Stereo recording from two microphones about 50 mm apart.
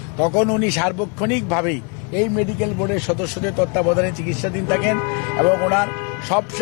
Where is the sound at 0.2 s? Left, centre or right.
Centre.